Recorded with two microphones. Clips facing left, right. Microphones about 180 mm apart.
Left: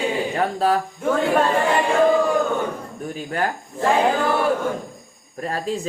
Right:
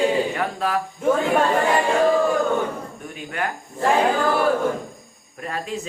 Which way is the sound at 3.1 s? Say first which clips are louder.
Left 4 dB; 35° left (ahead or behind).